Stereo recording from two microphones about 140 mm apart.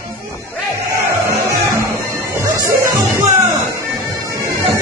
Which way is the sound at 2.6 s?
25° right (ahead or behind).